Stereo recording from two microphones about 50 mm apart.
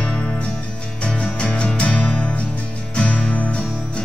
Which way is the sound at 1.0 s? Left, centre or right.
Left.